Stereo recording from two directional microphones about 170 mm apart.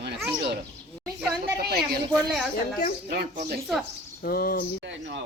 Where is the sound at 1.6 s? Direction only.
65° right (ahead or behind).